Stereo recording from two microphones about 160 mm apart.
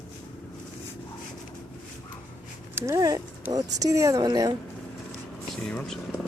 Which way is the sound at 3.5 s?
25° right (ahead or behind).